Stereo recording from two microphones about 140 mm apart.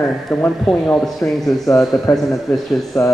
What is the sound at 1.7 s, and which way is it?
Speech, 20° left (ahead or behind).